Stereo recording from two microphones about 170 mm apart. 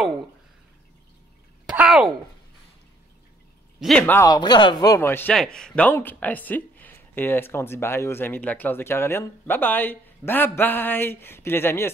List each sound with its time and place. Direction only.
1.7 s a sound: 5° right (ahead or behind)
3.8 s speech: 5° left (ahead or behind)
4.3 s speech: 25° left (ahead or behind)